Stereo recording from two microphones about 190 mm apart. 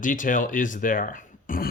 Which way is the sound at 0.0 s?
45° left (ahead or behind).